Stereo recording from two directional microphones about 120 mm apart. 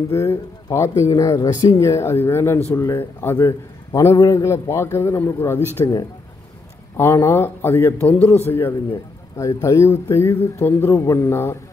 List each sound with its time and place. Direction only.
0.1 s a man's voice: 20° left (ahead or behind)
5.8 s speech: 30° left (ahead or behind)
7.0 s a man's voice: 20° left (ahead or behind)